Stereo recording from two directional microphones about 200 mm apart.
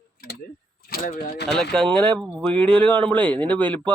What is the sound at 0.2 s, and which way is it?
Tick-tock, 50° left (ahead or behind).